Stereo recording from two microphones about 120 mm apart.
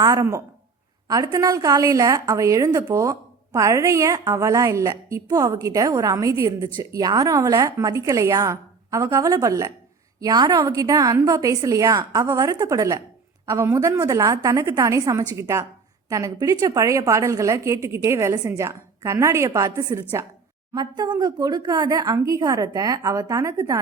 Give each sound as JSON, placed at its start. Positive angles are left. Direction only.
{"t": 0.0, "sound": "a woman's voice", "side_deg": -30}
{"t": 20.7, "sound": "speech", "side_deg": -35}